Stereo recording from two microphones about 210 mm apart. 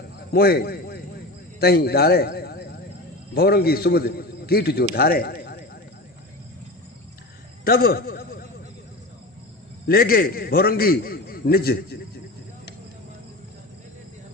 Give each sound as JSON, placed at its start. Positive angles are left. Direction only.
{"t": 0.2, "sound": "a man's voice", "side_deg": 50}
{"t": 7.6, "sound": "a man's voice", "side_deg": 45}
{"t": 9.8, "sound": "a man's voice", "side_deg": 45}